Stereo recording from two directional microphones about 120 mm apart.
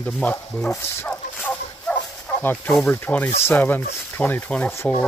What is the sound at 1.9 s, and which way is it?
Bow-wow, 10° left (ahead or behind).